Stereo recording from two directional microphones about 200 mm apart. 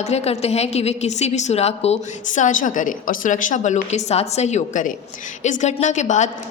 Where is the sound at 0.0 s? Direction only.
30° left (ahead or behind).